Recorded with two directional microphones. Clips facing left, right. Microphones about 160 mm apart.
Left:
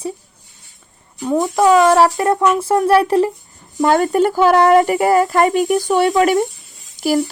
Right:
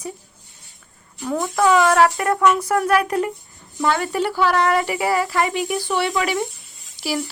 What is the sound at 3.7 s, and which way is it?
Speech, 45° left (ahead or behind).